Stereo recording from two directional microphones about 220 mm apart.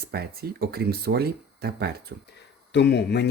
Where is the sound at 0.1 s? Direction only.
45° right (ahead or behind).